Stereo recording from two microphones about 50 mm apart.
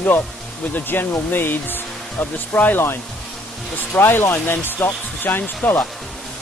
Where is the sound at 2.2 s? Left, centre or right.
Left.